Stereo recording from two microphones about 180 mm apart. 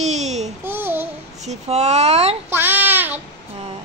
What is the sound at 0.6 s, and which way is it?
Babbling, 10° right (ahead or behind).